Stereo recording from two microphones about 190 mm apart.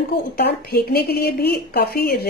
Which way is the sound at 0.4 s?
55° left (ahead or behind).